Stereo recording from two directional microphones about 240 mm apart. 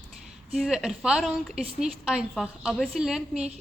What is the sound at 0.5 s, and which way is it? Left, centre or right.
A woman's voice, centre.